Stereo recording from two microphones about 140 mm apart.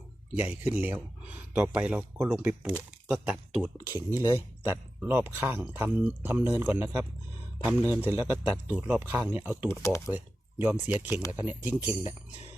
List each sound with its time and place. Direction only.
0.3 s speech: 15° right (ahead or behind)
3.6 s speech: 20° right (ahead or behind)
9.6 s speech: 20° left (ahead or behind)
10.1 s speech: 10° right (ahead or behind)